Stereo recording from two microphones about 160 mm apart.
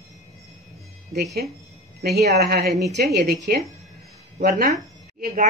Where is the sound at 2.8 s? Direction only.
90° right.